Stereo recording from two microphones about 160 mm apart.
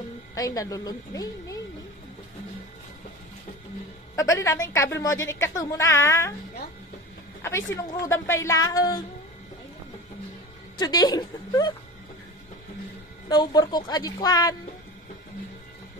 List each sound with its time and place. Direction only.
0.3 s a woman's voice: 20° left (ahead or behind)
4.2 s a woman's voice: 20° left (ahead or behind)
7.4 s a woman's voice: 15° left (ahead or behind)
10.8 s a woman's voice: 25° left (ahead or behind)
13.3 s a woman's voice: 25° left (ahead or behind)